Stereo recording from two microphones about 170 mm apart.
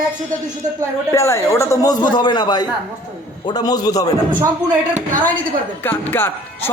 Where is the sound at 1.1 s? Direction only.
15° left (ahead or behind).